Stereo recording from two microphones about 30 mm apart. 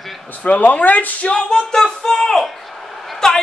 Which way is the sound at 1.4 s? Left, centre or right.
Left.